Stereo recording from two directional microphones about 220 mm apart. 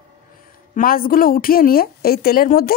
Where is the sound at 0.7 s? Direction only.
40° left (ahead or behind).